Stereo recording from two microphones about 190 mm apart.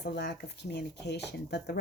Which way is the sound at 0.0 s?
60° left (ahead or behind).